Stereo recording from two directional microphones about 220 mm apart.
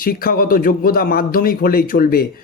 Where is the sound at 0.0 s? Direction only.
40° left (ahead or behind).